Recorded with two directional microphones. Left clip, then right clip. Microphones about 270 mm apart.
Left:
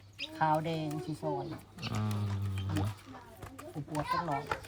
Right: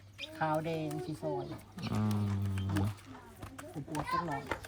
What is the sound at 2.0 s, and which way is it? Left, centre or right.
Speech, centre.